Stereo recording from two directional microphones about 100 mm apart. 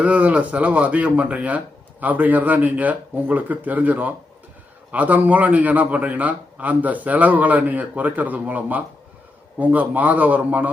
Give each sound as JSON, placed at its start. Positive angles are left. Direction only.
{"t": 0.0, "sound": "speech", "side_deg": -15}